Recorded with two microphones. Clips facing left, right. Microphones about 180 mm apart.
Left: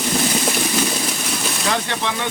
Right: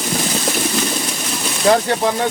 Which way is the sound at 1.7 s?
35° right (ahead or behind).